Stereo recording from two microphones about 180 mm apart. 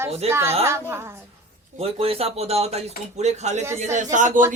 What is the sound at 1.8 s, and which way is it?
A man's voice, 35° right (ahead or behind).